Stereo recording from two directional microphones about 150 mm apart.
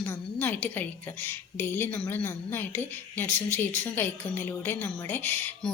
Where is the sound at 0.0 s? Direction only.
10° left (ahead or behind).